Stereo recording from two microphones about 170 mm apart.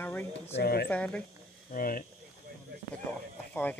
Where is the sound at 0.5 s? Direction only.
70° left (ahead or behind).